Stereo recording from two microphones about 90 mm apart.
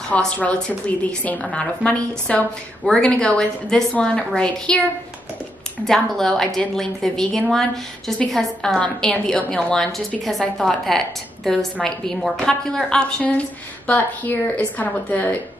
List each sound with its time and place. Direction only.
0.1 s a woman's voice: 15° left (ahead or behind)
5.9 s a woman's voice: 5° left (ahead or behind)
10.4 s a woman's voice: 10° left (ahead or behind)